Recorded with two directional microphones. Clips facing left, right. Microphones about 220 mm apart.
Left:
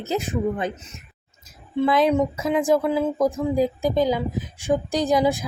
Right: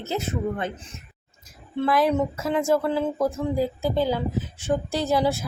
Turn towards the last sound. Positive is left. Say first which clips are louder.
# left 3 dB
turn(degrees=15)  # may be behind; listen again after turning